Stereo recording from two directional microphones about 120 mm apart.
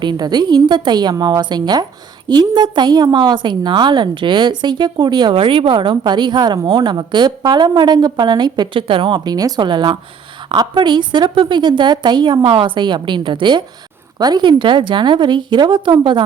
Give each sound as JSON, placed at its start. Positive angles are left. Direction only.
{"t": 0.0, "sound": "a woman's voice", "side_deg": -35}